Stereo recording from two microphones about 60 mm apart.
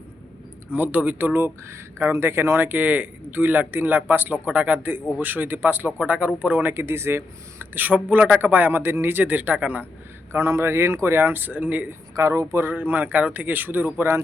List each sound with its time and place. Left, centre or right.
0.7 s speech: right
10.3 s speech: right
12.1 s speech: right
12.6 s speech: right